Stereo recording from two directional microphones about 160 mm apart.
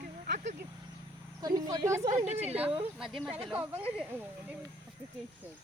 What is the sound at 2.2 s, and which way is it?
Speech, 45° right (ahead or behind).